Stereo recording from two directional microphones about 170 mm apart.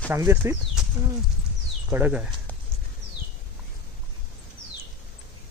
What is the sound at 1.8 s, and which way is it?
Speech, 10° right (ahead or behind).